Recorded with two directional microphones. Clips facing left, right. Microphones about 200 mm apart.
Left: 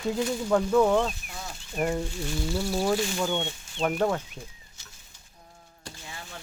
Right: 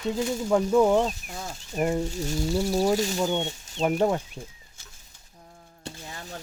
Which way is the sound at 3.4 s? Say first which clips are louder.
Right 2 dB; 40° right (ahead or behind).